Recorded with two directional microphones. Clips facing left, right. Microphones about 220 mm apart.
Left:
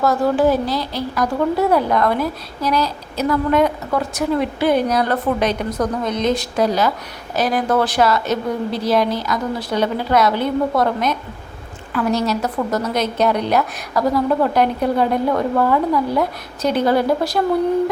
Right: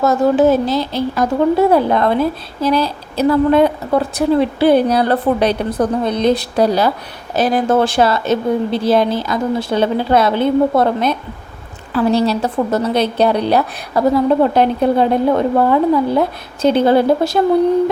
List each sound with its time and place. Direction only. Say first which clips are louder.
0.0 s speech: right 4 dB; 25° right (ahead or behind)